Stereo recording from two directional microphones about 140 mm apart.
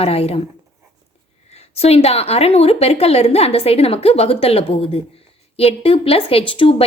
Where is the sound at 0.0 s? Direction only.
45° left (ahead or behind).